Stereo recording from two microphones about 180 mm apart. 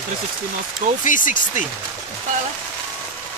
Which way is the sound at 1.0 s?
45° left (ahead or behind).